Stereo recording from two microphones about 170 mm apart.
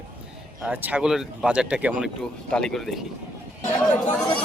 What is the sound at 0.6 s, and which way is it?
Speech, 10° right (ahead or behind).